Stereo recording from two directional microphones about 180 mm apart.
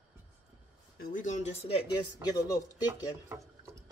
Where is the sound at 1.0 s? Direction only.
45° left (ahead or behind).